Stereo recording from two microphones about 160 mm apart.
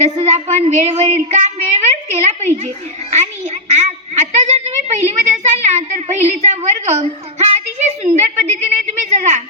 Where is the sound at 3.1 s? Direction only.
45° right (ahead or behind).